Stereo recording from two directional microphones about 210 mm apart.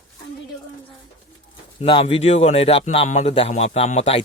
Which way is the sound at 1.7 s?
25° left (ahead or behind).